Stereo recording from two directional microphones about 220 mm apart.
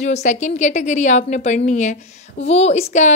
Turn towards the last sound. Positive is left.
turn(degrees=30)  # may be behind; listen again after turning